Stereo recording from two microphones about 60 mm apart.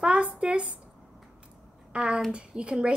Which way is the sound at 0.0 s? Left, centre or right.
Centre.